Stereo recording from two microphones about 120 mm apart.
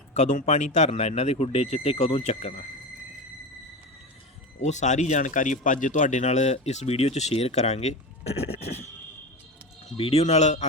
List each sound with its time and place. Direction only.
0.1 s speech: 85° left; by 2.6 s 60° left (ahead or behind)
4.6 s speech: 80° left; by 8.8 s 65° left (ahead or behind)
10.0 s speech: 60° left (ahead or behind); by 10.7 s 75° left (ahead or behind)